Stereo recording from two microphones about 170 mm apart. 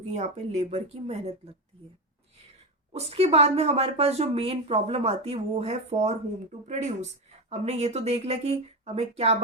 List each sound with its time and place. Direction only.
0.1 s speech: 40° right (ahead or behind)
2.9 s speech: 35° right (ahead or behind)